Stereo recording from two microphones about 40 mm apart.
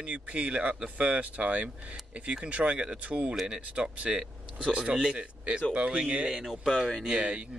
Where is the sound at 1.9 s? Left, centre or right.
Right.